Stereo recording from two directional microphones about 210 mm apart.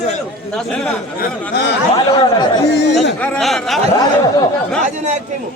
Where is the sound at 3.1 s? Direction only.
5° left (ahead or behind).